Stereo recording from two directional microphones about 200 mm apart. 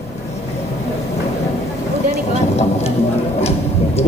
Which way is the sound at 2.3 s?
30° left (ahead or behind).